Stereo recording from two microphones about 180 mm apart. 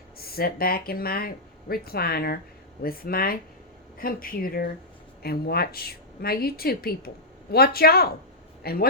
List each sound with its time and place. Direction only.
0.2 s speech: 55° left (ahead or behind)